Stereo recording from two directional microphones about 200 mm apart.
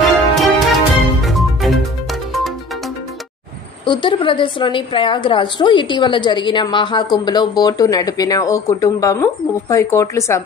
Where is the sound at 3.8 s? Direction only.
25° left (ahead or behind).